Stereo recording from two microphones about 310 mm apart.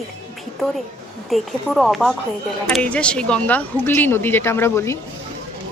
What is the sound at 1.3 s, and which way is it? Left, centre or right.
Speech, centre.